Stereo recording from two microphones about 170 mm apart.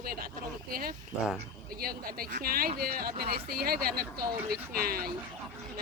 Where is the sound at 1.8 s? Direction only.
60° right (ahead or behind).